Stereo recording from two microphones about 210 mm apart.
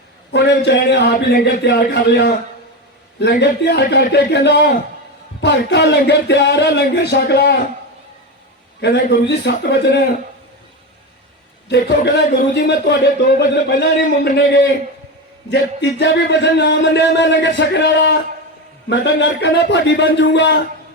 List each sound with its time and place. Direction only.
0.3 s speech: 55° left (ahead or behind)
8.8 s speech: 55° left (ahead or behind)
11.7 s speech: 55° left (ahead or behind)